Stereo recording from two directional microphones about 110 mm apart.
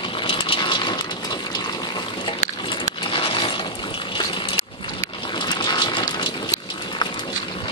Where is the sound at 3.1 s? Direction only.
50° left (ahead or behind).